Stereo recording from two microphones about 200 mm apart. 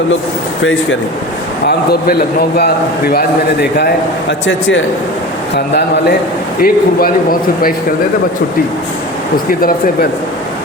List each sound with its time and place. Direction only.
1.6 s speech: 50° left (ahead or behind)
5.5 s a man's voice: 55° left (ahead or behind)
9.5 s speech: 45° left (ahead or behind)